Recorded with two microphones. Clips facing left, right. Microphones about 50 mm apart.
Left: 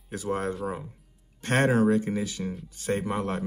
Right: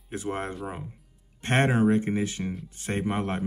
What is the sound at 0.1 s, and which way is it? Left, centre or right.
Speech, right.